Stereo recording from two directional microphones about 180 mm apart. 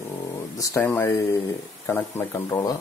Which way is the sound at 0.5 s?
20° left (ahead or behind).